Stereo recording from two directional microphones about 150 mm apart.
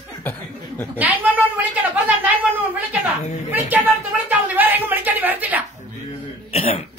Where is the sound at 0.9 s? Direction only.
10° right (ahead or behind).